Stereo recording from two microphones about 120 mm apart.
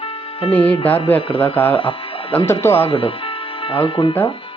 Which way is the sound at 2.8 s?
55° left (ahead or behind).